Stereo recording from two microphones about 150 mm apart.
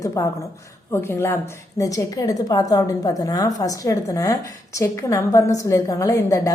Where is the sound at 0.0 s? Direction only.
20° left (ahead or behind).